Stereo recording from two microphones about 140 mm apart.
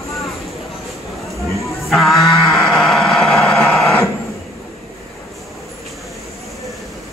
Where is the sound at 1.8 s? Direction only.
Centre (ahead or behind).